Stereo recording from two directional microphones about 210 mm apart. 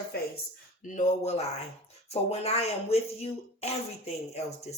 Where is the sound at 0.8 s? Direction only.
35° left (ahead or behind).